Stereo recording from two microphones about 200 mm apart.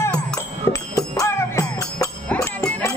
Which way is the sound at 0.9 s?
15° left (ahead or behind).